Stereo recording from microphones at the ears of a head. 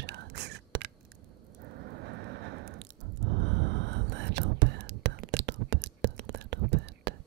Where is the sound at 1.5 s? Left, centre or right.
Right.